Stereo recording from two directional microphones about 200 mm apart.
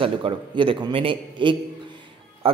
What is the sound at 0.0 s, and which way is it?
A man's voice, 25° right (ahead or behind).